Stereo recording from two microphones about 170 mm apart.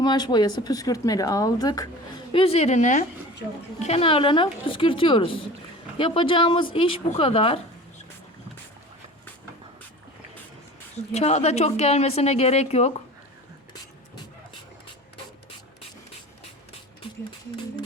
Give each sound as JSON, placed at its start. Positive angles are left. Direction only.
{"t": 0.0, "sound": "speech", "side_deg": 25}
{"t": 2.3, "sound": "a woman's voice", "side_deg": 35}
{"t": 11.1, "sound": "a woman's voice", "side_deg": 40}